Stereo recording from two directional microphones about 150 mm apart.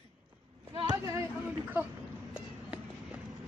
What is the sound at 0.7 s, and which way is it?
Speech, 35° right (ahead or behind).